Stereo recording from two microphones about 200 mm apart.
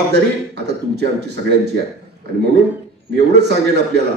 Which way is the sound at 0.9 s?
55° right (ahead or behind).